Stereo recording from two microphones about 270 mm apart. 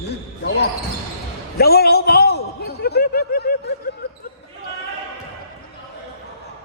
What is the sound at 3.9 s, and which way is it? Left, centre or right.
Basketball bounce, left.